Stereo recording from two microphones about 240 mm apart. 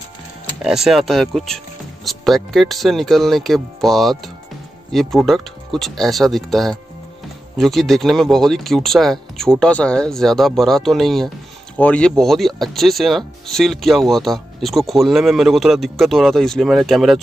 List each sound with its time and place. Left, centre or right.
0.6 s speech: centre